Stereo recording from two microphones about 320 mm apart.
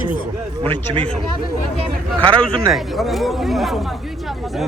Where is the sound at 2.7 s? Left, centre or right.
Centre.